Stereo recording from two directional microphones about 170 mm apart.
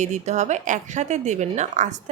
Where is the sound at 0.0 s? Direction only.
45° right (ahead or behind).